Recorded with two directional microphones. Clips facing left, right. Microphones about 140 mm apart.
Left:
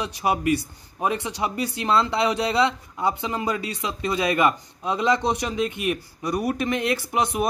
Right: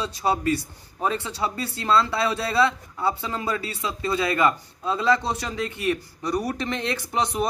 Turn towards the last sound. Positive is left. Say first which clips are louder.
# left 1 dB
turn(degrees=15)  # may be behind; listen again after turning